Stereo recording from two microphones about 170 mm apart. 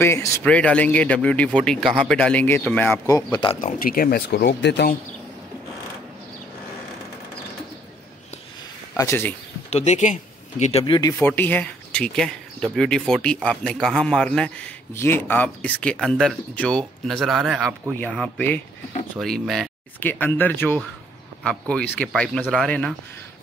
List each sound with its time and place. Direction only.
0.0 s speech: 15° left (ahead or behind)
3.5 s speech: 55° left (ahead or behind); by 4.9 s 80° left
8.9 s speech: 15° left (ahead or behind)
9.7 s speech: 40° left (ahead or behind)
11.1 s speech: 10° left (ahead or behind)